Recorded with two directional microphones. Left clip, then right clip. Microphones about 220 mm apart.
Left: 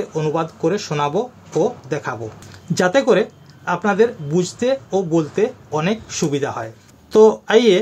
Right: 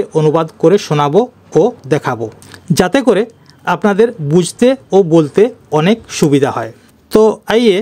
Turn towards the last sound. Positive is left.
turn(degrees=-50)  # may be behind; listen again after turning